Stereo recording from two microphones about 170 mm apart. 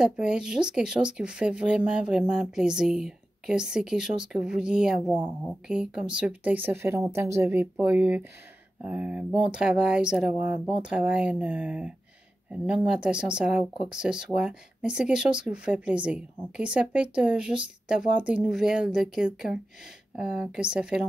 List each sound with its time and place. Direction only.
0.0 s speech: 5° right (ahead or behind)